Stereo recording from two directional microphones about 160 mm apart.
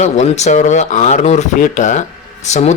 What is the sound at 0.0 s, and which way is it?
A man's voice, 45° left (ahead or behind).